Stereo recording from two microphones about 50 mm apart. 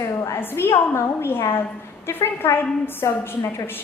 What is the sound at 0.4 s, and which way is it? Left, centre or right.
A woman's voice, left.